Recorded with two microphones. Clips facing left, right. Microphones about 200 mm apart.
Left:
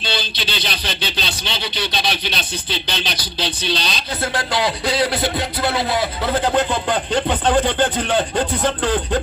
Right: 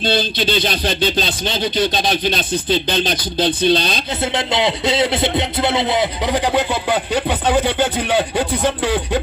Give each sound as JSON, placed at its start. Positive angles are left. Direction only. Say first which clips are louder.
{"t": 0.0, "sound": "speech", "louder": "right 8 dB", "side_deg": -50}
{"t": 4.2, "sound": "speech", "louder": "right 2 dB", "side_deg": -20}